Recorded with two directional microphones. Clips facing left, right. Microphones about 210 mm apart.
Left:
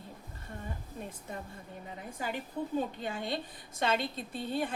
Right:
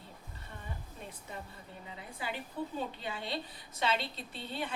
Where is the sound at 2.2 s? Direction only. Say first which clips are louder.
Left 2 dB; 45° left (ahead or behind).